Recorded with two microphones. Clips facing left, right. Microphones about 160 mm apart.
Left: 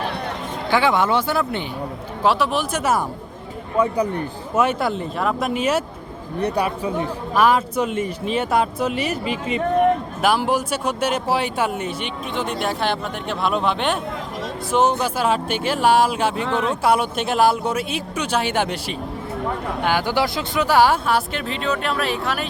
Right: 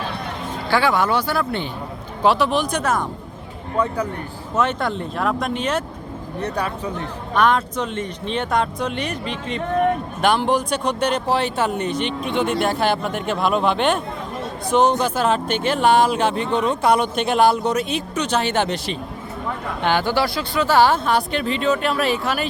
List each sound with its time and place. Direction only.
0.7 s speech: 20° left (ahead or behind)
2.2 s speech: 5° left (ahead or behind)